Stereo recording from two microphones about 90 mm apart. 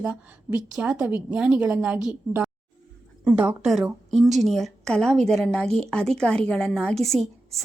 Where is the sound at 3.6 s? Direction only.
5° right (ahead or behind).